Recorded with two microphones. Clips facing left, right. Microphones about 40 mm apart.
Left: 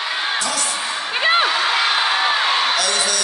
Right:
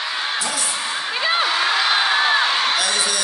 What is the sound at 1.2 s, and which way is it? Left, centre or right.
Music, left.